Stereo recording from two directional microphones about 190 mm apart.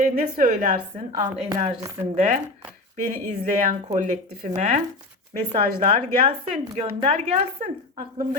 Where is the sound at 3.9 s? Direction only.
40° right (ahead or behind).